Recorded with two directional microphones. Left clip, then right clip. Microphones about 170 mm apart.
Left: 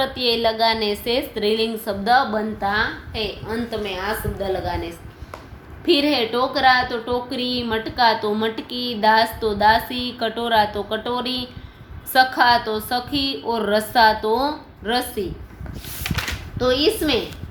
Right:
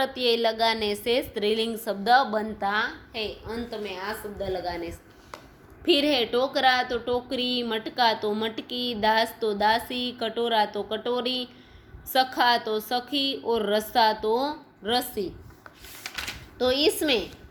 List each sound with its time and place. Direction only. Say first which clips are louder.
0.0 s a woman's voice: left 4 dB; 30° right (ahead or behind)
3.2 s a woman's voice: left 6 dB; 20° right (ahead or behind)
5.8 s a woman's voice: left 4 dB; 35° right (ahead or behind)
16.6 s a woman's voice: left 4 dB; 45° right (ahead or behind)